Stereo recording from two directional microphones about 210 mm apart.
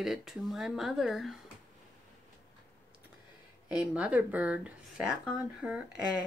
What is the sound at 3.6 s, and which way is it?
Speech, 5° right (ahead or behind).